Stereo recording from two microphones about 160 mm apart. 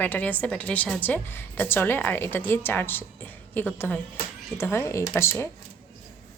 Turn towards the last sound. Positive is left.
turn(degrees=15)  # may be behind; listen again after turning